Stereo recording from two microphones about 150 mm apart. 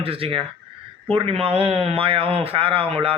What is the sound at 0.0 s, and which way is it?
Speech, 40° right (ahead or behind).